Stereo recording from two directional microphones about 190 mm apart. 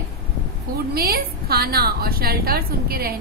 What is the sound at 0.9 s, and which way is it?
A woman's voice, 55° right (ahead or behind).